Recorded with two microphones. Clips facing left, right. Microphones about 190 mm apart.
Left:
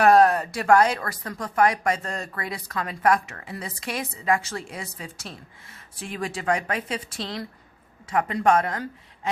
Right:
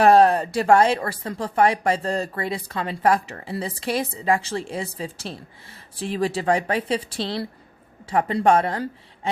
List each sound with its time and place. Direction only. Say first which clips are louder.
0.0 s speech: right 2 dB; 30° right (ahead or behind)